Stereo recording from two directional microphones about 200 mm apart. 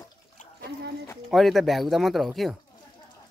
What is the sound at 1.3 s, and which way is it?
Speech, centre (ahead or behind).